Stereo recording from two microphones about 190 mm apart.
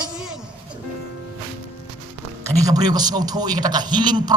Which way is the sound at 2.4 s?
20° right (ahead or behind).